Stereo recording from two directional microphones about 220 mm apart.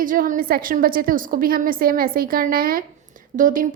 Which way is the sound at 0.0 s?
40° right (ahead or behind).